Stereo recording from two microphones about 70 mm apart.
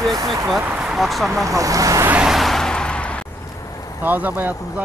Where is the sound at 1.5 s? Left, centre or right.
Right.